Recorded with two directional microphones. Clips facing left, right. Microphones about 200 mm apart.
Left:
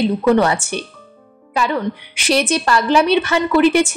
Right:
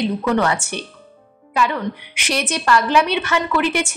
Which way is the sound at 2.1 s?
30° left (ahead or behind).